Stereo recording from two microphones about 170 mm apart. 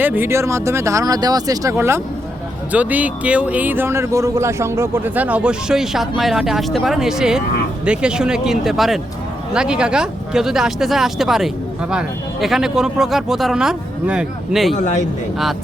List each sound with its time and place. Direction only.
0.0 s speech: 10° right (ahead or behind)
14.8 s a man's voice: 45° left (ahead or behind)